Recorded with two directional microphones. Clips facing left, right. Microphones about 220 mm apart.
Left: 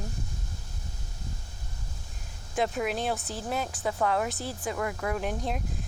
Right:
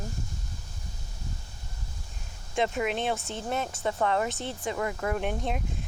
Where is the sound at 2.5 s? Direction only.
Centre (ahead or behind).